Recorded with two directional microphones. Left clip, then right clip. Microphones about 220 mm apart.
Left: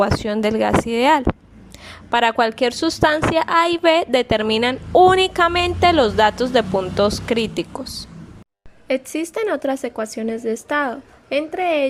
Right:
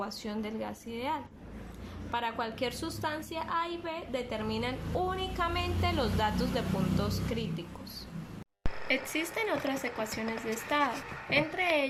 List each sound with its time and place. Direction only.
0.0 s a woman's voice: 35° left (ahead or behind)
8.9 s speech: 55° left (ahead or behind)